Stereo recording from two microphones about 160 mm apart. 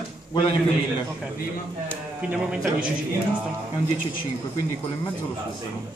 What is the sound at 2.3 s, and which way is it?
Speech, 5° right (ahead or behind).